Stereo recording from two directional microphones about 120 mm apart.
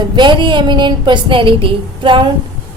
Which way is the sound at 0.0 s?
40° right (ahead or behind).